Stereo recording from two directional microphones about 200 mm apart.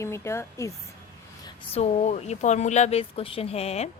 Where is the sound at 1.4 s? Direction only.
30° left (ahead or behind).